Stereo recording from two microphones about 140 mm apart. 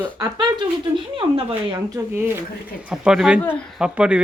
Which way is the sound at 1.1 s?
40° right (ahead or behind).